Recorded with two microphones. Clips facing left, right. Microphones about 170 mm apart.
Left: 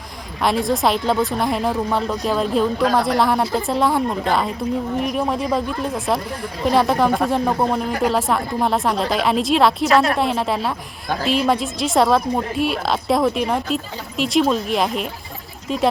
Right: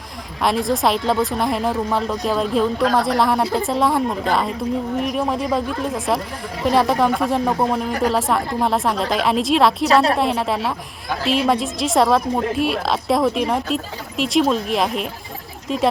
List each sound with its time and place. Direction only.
0.4 s speech: centre (ahead or behind)
9.9 s a woman's voice: 30° right (ahead or behind)
10.2 s speech: centre (ahead or behind)